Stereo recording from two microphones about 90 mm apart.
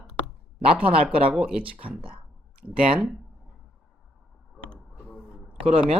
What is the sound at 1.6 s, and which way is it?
Speech, 85° right.